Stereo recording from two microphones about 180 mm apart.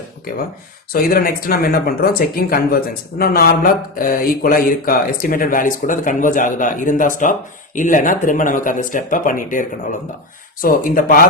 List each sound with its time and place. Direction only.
0.9 s speech: 55° left (ahead or behind)